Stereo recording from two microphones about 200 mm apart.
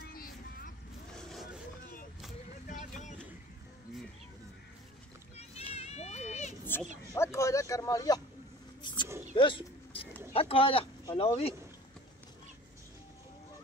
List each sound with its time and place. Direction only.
0.1 s vehicle: 45° left (ahead or behind)
1.1 s vehicle: centre (ahead or behind)
2.7 s vehicle: 35° left (ahead or behind)
5.4 s a sound: 30° left (ahead or behind)
6.6 s bow-wow: 10° left (ahead or behind)
7.2 s a sound: 15° left (ahead or behind)
8.8 s dog: 25° left (ahead or behind)
10.3 s speech: 30° left (ahead or behind)